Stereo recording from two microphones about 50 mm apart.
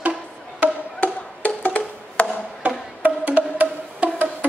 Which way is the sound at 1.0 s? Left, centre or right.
Left.